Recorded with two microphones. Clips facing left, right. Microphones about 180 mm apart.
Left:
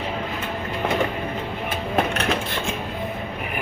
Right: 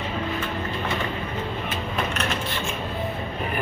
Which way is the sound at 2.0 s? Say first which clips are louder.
Left 6 dB; 60° left (ahead or behind).